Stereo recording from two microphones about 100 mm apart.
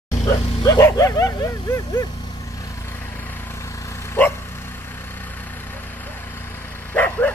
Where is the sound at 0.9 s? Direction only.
35° left (ahead or behind).